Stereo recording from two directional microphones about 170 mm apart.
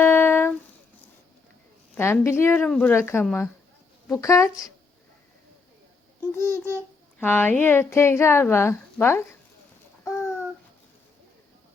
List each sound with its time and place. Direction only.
0.0 s a sound: 10° left (ahead or behind)
2.0 s a woman's voice: 15° left (ahead or behind)
6.3 s a woman's voice: 15° left (ahead or behind)